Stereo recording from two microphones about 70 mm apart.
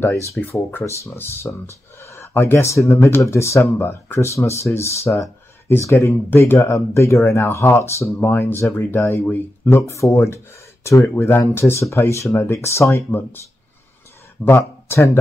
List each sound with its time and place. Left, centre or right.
0.5 s speech: left
14.4 s speech: left